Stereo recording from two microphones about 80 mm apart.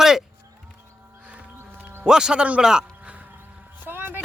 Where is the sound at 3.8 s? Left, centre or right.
Right.